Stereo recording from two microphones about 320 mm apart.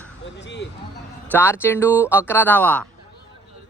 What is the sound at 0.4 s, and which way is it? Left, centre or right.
Speech, left.